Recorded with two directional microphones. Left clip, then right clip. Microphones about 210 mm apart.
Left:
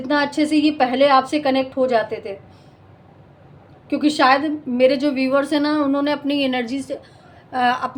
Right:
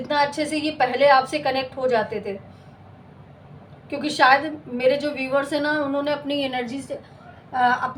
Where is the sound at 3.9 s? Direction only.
55° left (ahead or behind).